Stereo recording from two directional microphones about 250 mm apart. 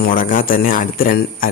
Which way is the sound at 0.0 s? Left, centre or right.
Left.